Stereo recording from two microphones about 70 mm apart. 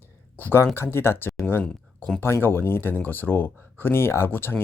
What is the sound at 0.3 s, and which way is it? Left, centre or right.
Speech, left.